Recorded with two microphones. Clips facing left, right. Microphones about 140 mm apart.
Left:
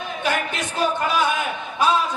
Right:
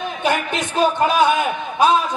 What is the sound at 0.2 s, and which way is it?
Speech, 20° right (ahead or behind).